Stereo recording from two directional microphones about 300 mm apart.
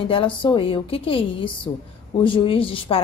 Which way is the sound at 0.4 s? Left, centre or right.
Centre.